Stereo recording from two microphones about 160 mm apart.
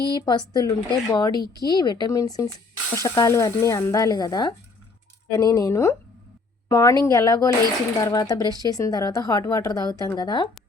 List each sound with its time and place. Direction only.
0.1 s speech: 25° left (ahead or behind)